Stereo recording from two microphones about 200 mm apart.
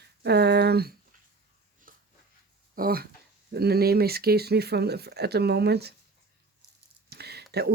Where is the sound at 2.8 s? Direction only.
45° right (ahead or behind).